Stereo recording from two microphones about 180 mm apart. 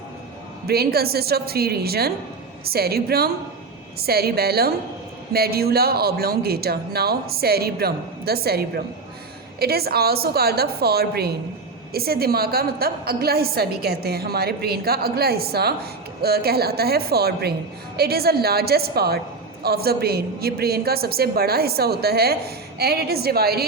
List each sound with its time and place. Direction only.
0.7 s a woman's voice: 60° right (ahead or behind)